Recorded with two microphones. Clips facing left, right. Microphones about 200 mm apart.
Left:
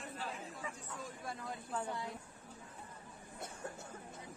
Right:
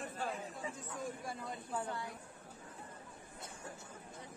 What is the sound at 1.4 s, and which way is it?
Speech, centre (ahead or behind).